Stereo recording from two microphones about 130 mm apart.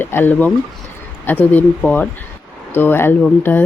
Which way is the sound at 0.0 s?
15° left (ahead or behind).